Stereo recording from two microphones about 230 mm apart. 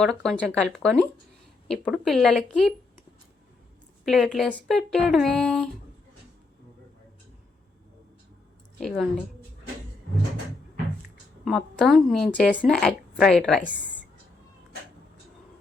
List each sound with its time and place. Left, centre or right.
0.0 s speech: centre
4.0 s speech: centre
8.8 s speech: centre
11.4 s speech: centre